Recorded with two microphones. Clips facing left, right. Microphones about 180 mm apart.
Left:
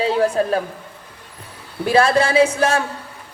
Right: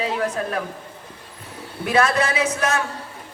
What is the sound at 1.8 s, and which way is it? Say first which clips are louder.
Speech: left 4 dB; 30° left (ahead or behind).